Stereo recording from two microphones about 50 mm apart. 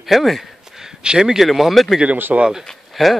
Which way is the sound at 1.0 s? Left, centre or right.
Centre.